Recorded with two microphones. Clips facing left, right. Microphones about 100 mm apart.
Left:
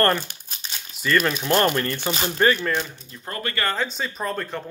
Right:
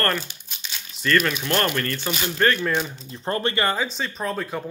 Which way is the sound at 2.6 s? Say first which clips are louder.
Right 1 dB; 15° right (ahead or behind).